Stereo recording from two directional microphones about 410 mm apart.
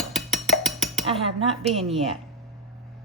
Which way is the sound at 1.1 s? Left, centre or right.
Centre.